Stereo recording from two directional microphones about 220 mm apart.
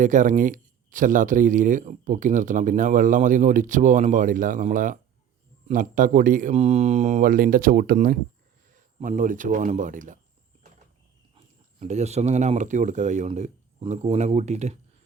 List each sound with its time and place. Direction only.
0.0 s speech: 35° right (ahead or behind)
11.3 s speech: 30° right (ahead or behind)